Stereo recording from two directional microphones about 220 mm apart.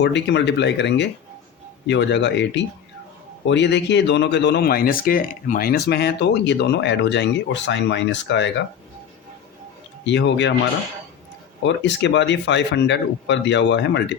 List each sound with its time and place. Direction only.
0.0 s speech: 55° left (ahead or behind)
10.1 s speech: 55° left (ahead or behind)
11.6 s speech: 55° left (ahead or behind)